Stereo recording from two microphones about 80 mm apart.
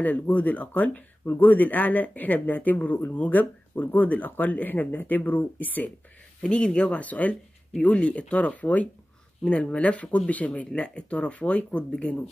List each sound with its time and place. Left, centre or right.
0.0 s speech: centre